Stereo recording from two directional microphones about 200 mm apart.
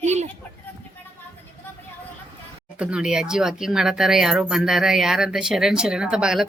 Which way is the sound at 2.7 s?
5° right (ahead or behind).